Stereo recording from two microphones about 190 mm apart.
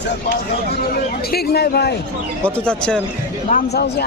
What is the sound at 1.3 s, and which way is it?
Speech, 55° left (ahead or behind).